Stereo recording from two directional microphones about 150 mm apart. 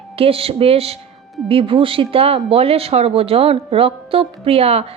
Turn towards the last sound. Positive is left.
turn(degrees=-40)  # may be behind; listen again after turning